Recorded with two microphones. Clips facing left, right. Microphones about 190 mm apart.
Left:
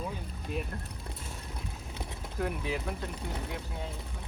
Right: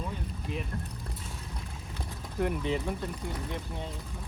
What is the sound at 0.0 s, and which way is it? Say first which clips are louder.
Boat: right 1 dB; centre (ahead or behind).